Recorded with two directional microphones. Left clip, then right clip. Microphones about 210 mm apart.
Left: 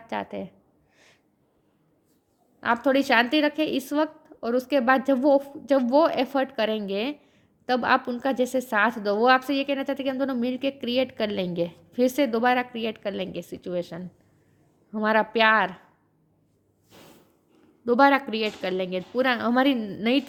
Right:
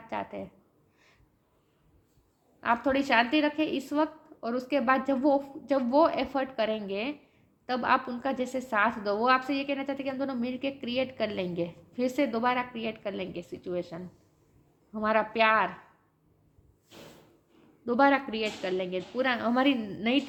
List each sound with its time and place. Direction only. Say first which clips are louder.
0.1 s a woman's voice: left 4 dB; 50° left (ahead or behind)
2.6 s a woman's voice: left 4 dB; 50° left (ahead or behind)
17.8 s a woman's voice: left 5 dB; 45° left (ahead or behind)